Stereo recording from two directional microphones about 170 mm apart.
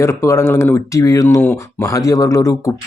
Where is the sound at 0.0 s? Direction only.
15° left (ahead or behind).